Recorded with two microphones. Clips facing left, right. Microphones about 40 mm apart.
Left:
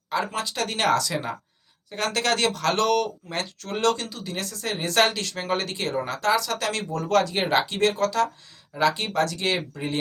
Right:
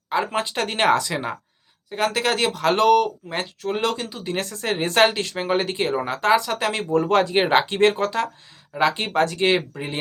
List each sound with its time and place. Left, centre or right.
0.1 s speech: right
2.1 s speech: centre
4.2 s speech: right